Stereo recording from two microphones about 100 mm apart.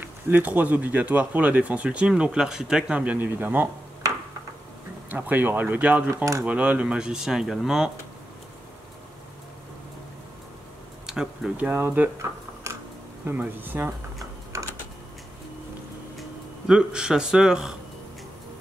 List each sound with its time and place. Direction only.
0.0 s speech: 20° right (ahead or behind)
5.1 s speech: 20° right (ahead or behind)
11.1 s speech: 5° right (ahead or behind)
12.7 s a sound: 30° right (ahead or behind)
13.2 s speech: 20° right (ahead or behind)
14.5 s typing: 35° right (ahead or behind)
16.2 s speech: 10° right (ahead or behind)